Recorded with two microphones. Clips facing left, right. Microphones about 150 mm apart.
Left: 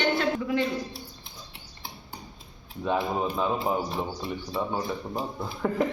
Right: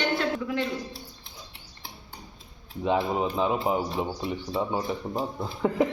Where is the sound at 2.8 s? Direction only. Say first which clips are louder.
Right 2 dB; 20° right (ahead or behind).